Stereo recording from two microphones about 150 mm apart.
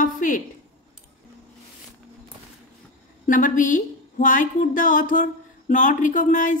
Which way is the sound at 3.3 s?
60° left (ahead or behind).